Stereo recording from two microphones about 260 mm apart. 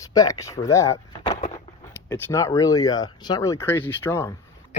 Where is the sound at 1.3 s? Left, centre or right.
Left.